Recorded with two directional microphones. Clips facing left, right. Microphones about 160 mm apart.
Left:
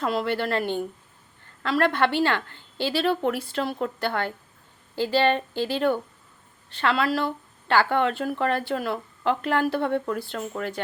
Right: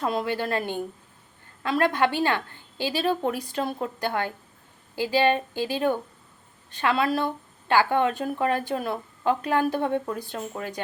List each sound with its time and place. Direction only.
0.0 s a woman's voice: 20° right (ahead or behind)